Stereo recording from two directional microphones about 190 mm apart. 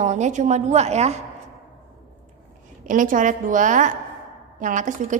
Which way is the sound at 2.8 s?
45° right (ahead or behind).